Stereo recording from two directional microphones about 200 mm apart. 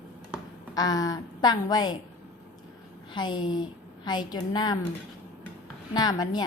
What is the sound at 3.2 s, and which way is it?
A woman's voice, 20° left (ahead or behind).